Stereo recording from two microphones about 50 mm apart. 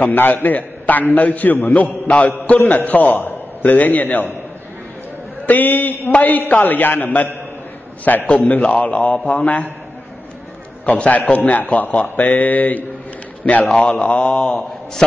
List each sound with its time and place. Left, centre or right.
0.0 s a man's voice: left
1.7 s a man's voice: left
2.6 s a man's voice: left
5.5 s a man's voice: left
8.4 s a man's voice: left
10.9 s a man's voice: left
13.7 s a man's voice: centre